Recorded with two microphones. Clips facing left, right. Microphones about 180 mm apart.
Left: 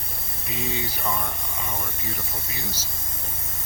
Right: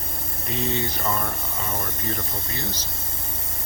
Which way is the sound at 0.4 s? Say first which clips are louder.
Right 4 dB; 5° left (ahead or behind).